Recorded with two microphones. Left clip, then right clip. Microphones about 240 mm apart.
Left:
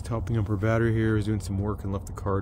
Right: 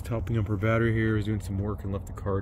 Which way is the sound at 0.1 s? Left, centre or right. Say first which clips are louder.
Left 1 dB; centre.